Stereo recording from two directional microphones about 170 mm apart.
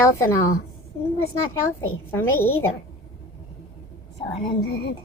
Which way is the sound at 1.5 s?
15° left (ahead or behind).